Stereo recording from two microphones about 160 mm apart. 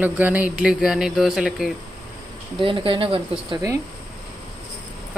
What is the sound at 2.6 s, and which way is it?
Speech, 35° right (ahead or behind).